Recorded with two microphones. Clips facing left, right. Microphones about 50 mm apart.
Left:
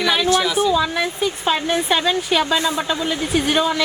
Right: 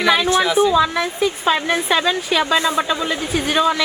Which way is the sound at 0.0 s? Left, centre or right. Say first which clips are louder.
Right 2 dB; centre.